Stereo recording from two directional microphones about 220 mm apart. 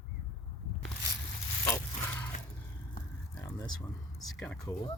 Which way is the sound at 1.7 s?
10° left (ahead or behind).